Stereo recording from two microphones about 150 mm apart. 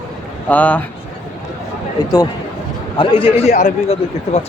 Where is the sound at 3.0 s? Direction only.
35° left (ahead or behind).